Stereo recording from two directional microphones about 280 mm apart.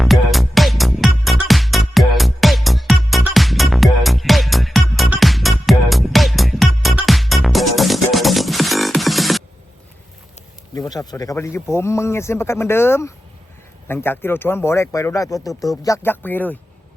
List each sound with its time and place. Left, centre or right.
0.0 s music: centre
10.8 s speech: centre